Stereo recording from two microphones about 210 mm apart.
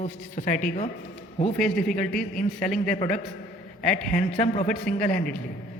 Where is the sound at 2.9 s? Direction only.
35° left (ahead or behind).